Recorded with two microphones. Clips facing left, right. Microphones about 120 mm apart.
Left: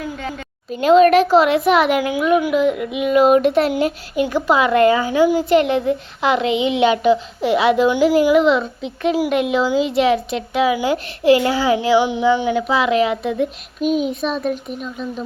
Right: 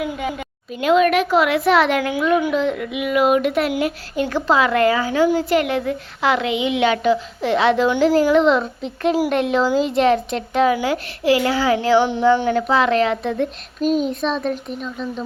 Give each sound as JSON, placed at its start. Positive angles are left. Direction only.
{"t": 0.0, "sound": "a woman's voice", "side_deg": -15}
{"t": 0.7, "sound": "speech", "side_deg": 35}
{"t": 4.1, "sound": "a woman's voice", "side_deg": 15}
{"t": 10.8, "sound": "a woman's voice", "side_deg": 20}